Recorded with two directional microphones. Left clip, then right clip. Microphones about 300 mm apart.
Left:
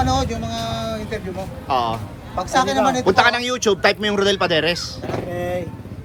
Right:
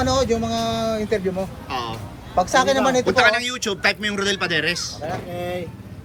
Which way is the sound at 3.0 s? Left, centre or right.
Centre.